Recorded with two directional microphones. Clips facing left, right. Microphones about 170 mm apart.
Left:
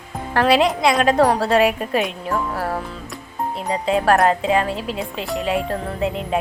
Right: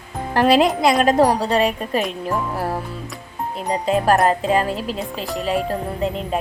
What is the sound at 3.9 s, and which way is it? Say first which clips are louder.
A woman's voice: even; centre (ahead or behind).